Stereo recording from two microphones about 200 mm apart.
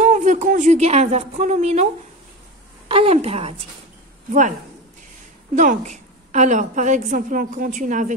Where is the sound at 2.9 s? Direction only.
30° right (ahead or behind).